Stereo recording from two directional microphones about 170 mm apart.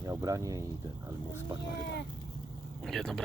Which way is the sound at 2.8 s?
Centre (ahead or behind).